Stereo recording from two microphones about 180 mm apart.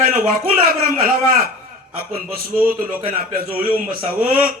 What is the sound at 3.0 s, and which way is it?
Speech, 55° right (ahead or behind).